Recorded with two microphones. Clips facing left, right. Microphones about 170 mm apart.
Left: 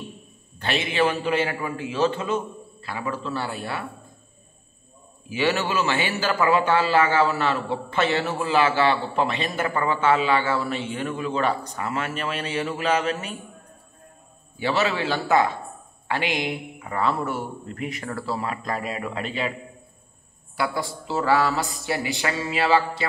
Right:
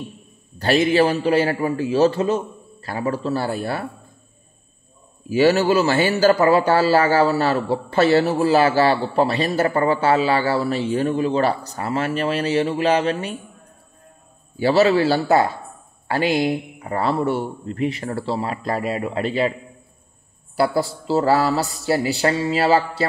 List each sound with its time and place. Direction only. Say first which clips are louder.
0.6 s a man's voice: right 7 dB; 40° right (ahead or behind)
5.3 s a man's voice: right 8 dB; 40° right (ahead or behind)
14.6 s a man's voice: right 8 dB; 35° right (ahead or behind)
20.5 s a man's voice: right 7 dB; 35° right (ahead or behind)